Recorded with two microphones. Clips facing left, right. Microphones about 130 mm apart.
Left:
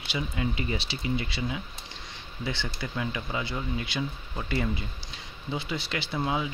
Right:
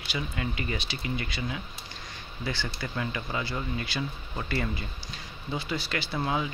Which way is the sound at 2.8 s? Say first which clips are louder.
Even; 10° left (ahead or behind).